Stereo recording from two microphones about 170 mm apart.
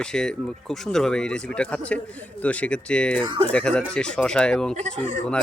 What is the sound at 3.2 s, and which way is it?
Speech, 30° right (ahead or behind).